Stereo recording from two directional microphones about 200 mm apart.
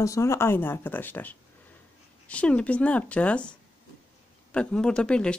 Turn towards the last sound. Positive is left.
turn(degrees=5)  # may be behind; listen again after turning